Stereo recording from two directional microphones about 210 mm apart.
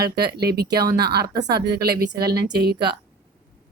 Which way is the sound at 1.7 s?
50° right (ahead or behind).